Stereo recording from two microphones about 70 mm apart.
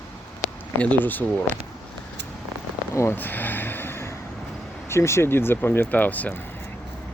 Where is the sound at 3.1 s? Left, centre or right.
Left.